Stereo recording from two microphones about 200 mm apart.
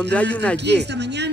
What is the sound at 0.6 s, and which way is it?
Speech, 60° right (ahead or behind).